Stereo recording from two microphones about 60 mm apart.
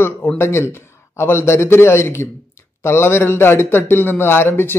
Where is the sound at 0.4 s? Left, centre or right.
Left.